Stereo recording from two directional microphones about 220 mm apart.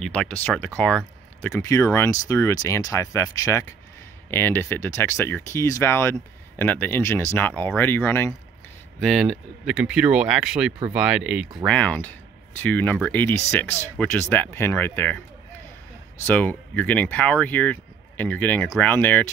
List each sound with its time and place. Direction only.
0.0 s speech: 5° left (ahead or behind)
16.3 s speech: 10° left (ahead or behind)